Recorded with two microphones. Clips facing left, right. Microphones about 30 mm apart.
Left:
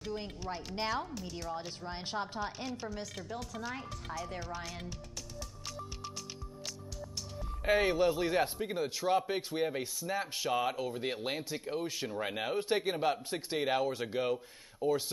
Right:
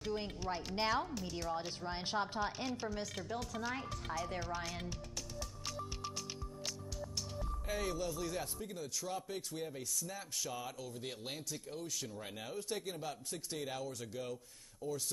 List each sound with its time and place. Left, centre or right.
0.0 s speech: centre
7.6 s a man's voice: left